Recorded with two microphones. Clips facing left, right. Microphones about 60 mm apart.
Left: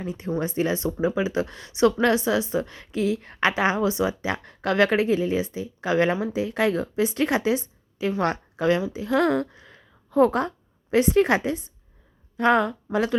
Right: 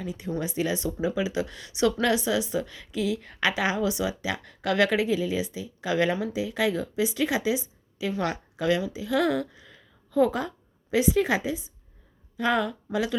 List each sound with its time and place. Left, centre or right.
0.0 s speech: left
6.3 s a woman's voice: left
12.4 s speech: left